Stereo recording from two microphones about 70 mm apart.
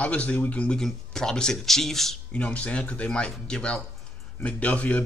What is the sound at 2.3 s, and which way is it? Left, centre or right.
Speech, centre.